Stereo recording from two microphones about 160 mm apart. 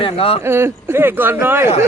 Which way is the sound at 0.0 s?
35° left (ahead or behind).